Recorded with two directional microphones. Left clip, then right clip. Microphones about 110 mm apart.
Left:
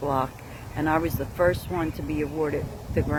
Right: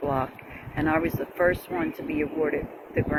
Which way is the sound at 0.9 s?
35° left (ahead or behind).